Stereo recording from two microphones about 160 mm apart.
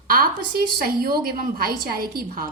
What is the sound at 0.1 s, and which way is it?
A woman's voice, 70° right (ahead or behind).